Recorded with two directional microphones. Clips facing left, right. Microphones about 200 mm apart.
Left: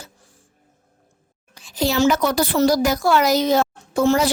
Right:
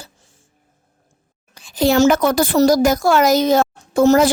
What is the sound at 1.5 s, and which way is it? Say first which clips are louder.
A woman's voice: right 5 dB; 55° right (ahead or behind).